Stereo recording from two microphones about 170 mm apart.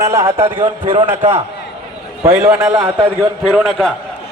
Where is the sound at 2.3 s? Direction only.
10° right (ahead or behind).